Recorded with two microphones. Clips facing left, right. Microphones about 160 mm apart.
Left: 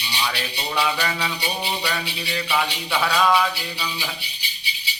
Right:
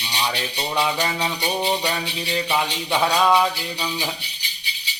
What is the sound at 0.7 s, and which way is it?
Rattle, 20° right (ahead or behind).